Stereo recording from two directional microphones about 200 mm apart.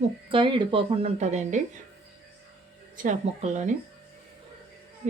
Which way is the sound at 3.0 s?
35° right (ahead or behind).